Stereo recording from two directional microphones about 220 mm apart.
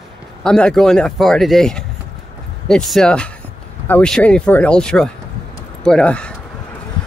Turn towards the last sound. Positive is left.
turn(degrees=5)  # may be behind; listen again after turning